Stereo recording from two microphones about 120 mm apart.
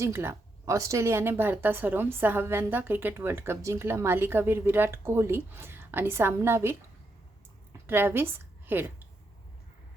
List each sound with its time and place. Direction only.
0.0 s a woman's voice: 20° right (ahead or behind)